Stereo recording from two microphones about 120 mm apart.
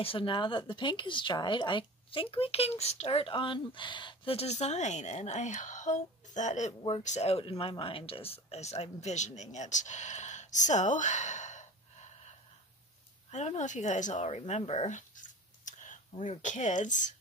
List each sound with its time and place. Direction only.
0.0 s speech: 45° left (ahead or behind); by 6.7 s 80° left
6.9 s a woman's voice: 70° left (ahead or behind); by 17.1 s 90° left